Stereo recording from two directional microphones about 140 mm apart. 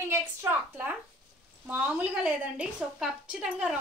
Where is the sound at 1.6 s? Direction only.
10° right (ahead or behind).